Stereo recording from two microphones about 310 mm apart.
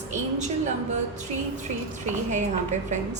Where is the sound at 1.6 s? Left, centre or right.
Right.